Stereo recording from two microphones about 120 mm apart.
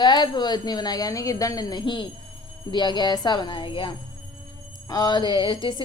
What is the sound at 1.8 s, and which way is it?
Speech, 40° left (ahead or behind).